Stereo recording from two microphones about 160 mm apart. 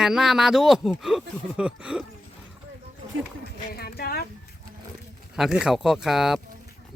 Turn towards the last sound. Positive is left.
turn(degrees=0)  # may be behind; listen again after turning